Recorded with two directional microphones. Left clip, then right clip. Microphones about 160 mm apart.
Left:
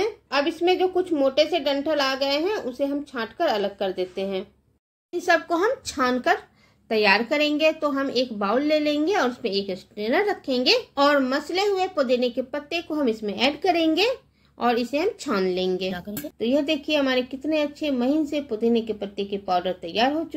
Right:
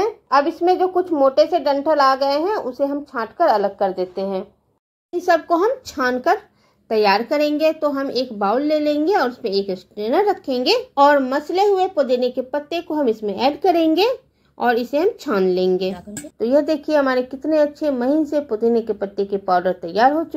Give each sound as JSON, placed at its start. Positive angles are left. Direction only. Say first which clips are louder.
{"t": 0.0, "sound": "a woman's voice", "louder": "right 7 dB", "side_deg": -5}
{"t": 5.1, "sound": "speech", "louder": "right 5 dB", "side_deg": 0}
{"t": 16.3, "sound": "a woman's voice", "louder": "right 6 dB", "side_deg": 15}